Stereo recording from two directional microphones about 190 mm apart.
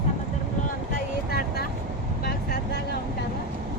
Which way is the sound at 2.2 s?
60° left (ahead or behind).